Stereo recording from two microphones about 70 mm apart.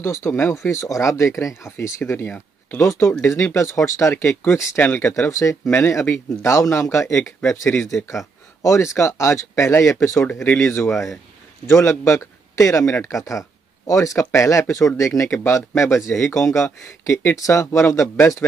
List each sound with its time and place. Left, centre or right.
0.0 s speech: left
0.7 s speech: left
4.4 s speech: left
5.7 s speech: left